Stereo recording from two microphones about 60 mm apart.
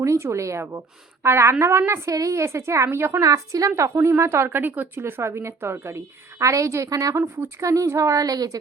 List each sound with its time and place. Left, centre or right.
0.0 s a woman's voice: right
2.0 s a woman's voice: right
2.4 s a woman's voice: right
3.2 s a woman's voice: right
3.8 s a woman's voice: right
4.4 s a woman's voice: right
6.4 s a woman's voice: right